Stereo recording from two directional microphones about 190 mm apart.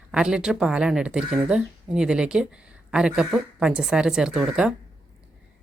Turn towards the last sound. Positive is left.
turn(degrees=0)  # may be behind; listen again after turning